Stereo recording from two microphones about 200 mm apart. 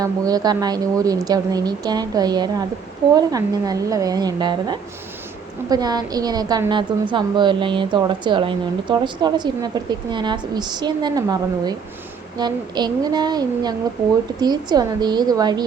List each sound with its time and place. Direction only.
0.0 s a woman's voice: 20° right (ahead or behind)